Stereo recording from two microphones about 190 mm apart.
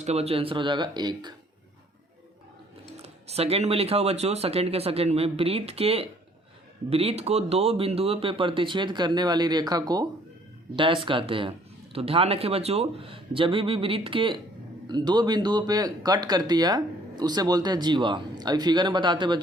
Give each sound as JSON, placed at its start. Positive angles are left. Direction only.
{"t": 0.0, "sound": "speech", "side_deg": -35}
{"t": 3.0, "sound": "speech", "side_deg": -35}